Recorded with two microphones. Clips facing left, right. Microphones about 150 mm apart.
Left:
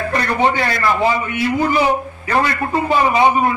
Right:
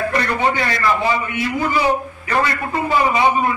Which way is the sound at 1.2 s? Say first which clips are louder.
Left 3 dB; 20° left (ahead or behind).